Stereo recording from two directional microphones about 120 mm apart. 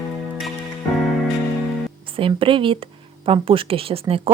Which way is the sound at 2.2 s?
50° right (ahead or behind).